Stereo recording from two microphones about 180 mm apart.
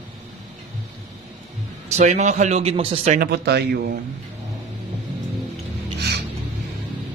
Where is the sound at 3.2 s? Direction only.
65° right (ahead or behind).